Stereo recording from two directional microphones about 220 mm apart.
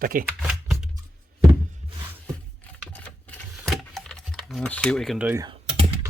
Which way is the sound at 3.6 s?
Centre (ahead or behind).